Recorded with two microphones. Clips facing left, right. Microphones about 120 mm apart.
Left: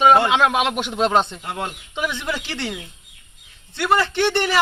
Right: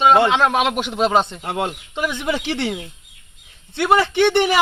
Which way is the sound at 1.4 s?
20° right (ahead or behind).